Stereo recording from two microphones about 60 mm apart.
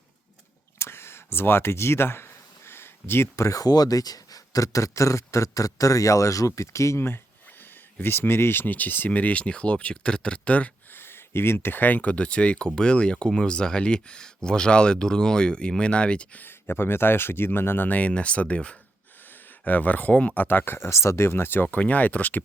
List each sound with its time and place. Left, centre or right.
0.8 s a sound: left
3.3 s speech: left
7.9 s speech: left
10.9 s speech: left; by 16.4 s centre
16.4 s speech: left
21.8 s speech: left